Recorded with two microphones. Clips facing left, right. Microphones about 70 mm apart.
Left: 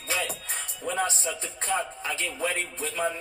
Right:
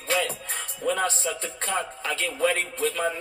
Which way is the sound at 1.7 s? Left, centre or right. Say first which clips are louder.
Even; centre.